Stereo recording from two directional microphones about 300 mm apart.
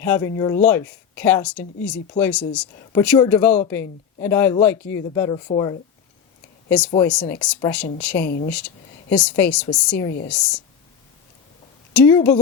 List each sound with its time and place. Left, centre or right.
0.0 s speech: centre
8.2 s speech: left
8.4 s speech: centre
11.9 s speech: centre